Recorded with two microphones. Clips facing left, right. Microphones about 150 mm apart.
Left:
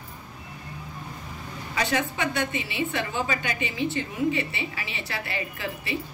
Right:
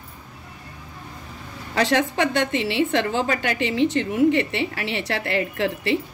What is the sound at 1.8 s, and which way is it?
A woman's voice, 70° right (ahead or behind).